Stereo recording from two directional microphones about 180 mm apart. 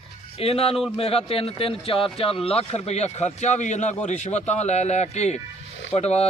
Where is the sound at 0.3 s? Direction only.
35° left (ahead or behind).